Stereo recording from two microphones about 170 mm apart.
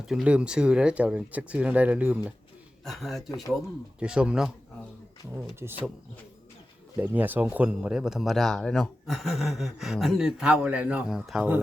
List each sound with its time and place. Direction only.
0.0 s speech: 5° right (ahead or behind)
2.8 s speech: centre (ahead or behind)
7.0 s speech: 10° right (ahead or behind)